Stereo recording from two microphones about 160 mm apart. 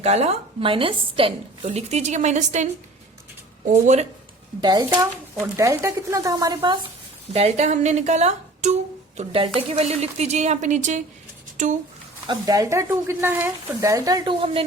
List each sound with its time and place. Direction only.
0.0 s a woman's voice: 40° right (ahead or behind)
3.7 s speech: 45° right (ahead or behind)
4.6 s speech: 25° right (ahead or behind)
7.3 s a woman's voice: 45° right (ahead or behind)
12.3 s speech: 25° right (ahead or behind)